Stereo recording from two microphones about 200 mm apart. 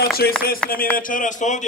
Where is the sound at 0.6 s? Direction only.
5° left (ahead or behind).